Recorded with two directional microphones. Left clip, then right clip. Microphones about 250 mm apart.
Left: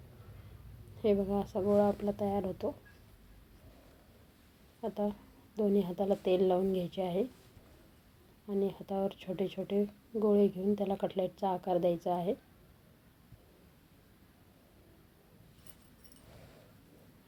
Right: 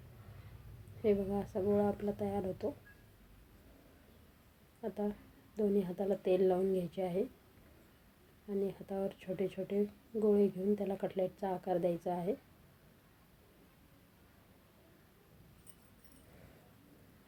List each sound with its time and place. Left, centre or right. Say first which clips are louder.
1.0 s speech: left 3 dB; left
4.8 s speech: left 4 dB; left
8.4 s speech: left 4 dB; left